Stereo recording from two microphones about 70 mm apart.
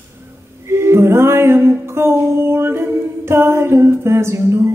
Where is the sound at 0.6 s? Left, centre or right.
Right.